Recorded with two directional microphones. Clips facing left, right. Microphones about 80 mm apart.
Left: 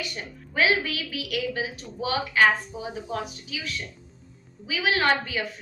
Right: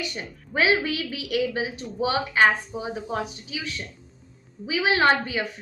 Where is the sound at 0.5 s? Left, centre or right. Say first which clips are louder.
Right 2 dB; right.